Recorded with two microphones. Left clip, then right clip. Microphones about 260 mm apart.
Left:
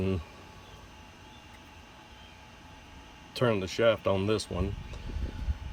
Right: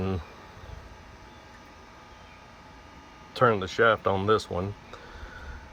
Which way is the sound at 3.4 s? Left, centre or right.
Centre.